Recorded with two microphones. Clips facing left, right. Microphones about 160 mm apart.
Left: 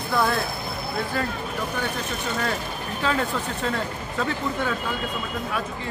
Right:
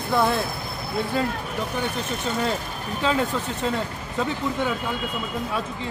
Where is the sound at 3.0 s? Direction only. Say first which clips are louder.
Right 2 dB; 20° right (ahead or behind).